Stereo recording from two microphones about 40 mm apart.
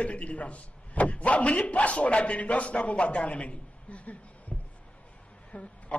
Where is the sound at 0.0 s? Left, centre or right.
Left.